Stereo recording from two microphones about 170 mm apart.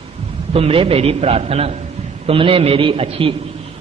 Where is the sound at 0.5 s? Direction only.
35° right (ahead or behind).